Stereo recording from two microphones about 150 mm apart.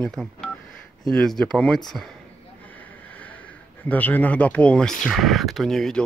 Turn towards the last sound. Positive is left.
turn(degrees=5)  # may be behind; listen again after turning